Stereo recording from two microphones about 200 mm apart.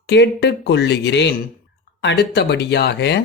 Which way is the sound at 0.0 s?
55° left (ahead or behind).